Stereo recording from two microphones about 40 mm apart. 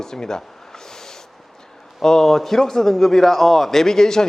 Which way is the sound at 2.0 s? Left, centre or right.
Centre.